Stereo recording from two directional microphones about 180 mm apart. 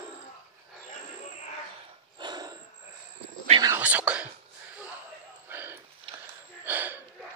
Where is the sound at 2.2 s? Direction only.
25° right (ahead or behind).